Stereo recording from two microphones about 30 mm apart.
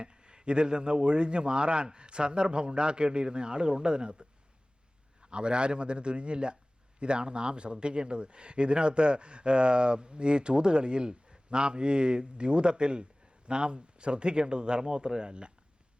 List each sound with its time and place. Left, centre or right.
0.0 s a man's voice: right